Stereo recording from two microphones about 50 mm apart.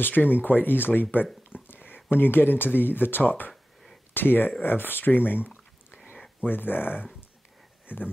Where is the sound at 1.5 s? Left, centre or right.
Left.